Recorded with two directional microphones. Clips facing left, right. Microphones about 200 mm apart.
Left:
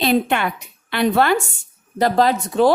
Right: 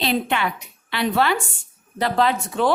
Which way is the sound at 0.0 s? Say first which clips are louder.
Left 4 dB; 50° left (ahead or behind).